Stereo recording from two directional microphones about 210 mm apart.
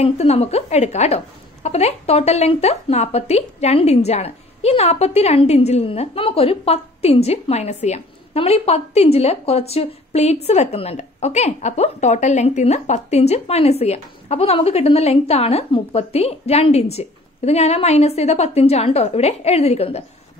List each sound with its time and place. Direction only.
0.0 s a woman's voice: 30° left (ahead or behind)